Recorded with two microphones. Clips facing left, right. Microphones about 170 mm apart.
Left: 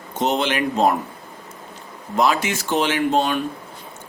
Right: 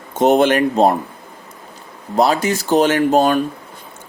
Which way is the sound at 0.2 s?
50° right (ahead or behind).